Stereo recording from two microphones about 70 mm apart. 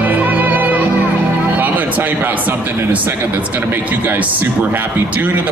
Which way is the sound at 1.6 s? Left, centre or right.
Right.